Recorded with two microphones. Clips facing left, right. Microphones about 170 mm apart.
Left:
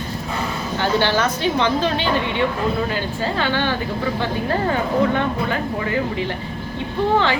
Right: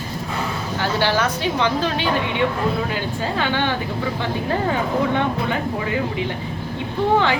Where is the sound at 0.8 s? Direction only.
5° right (ahead or behind).